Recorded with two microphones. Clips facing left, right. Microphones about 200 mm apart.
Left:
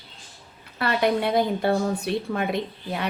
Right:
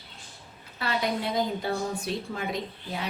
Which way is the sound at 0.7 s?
65° left (ahead or behind).